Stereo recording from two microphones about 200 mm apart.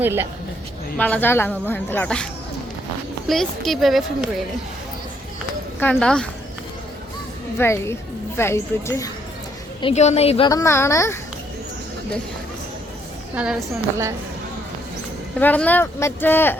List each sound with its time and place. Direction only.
0.0 s speech: 10° right (ahead or behind)
0.9 s speech: 10° left (ahead or behind)
3.2 s speech: centre (ahead or behind)
5.8 s speech: 5° left (ahead or behind)
7.6 s speech: 15° left (ahead or behind)
9.8 s a woman's voice: 35° left (ahead or behind)
10.5 s speech: 15° left (ahead or behind)
13.3 s speech: 5° right (ahead or behind)
15.4 s speech: 10° left (ahead or behind)